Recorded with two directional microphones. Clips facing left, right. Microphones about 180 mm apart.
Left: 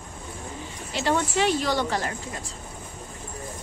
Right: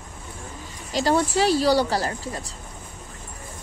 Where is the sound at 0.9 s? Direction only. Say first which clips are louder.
Right 4 dB; 35° right (ahead or behind).